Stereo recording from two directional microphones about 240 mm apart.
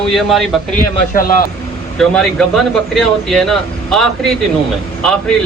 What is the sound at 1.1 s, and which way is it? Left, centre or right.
Speech, left.